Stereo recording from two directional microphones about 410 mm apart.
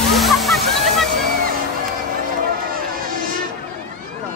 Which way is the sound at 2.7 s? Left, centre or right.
Right.